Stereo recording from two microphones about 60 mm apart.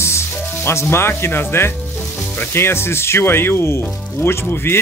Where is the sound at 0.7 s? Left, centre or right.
Left.